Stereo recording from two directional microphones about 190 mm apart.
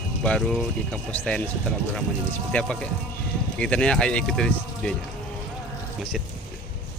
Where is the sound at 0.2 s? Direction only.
5° left (ahead or behind).